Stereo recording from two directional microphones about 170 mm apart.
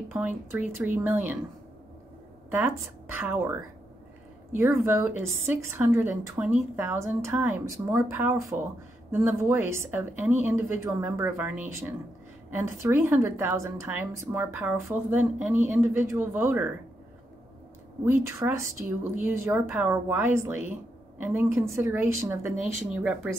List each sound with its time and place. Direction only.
0.1 s a woman's voice: 10° right (ahead or behind)
2.5 s a woman's voice: 10° right (ahead or behind)
18.0 s a woman's voice: 15° right (ahead or behind)